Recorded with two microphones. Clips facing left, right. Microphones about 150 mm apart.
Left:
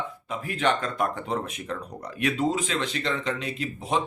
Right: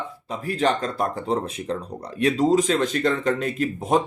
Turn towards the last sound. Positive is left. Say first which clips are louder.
# right 6 dB
turn(degrees=-45)  # may be behind; listen again after turning